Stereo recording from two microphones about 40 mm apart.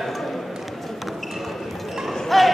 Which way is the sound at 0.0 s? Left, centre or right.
Centre.